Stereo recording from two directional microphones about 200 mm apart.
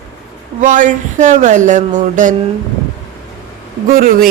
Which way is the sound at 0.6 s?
40° right (ahead or behind).